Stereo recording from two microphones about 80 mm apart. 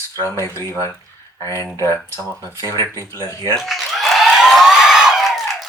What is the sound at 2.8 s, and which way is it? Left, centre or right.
Speech, left.